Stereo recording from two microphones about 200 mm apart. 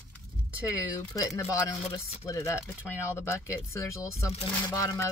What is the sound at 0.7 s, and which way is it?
Speech, 15° left (ahead or behind).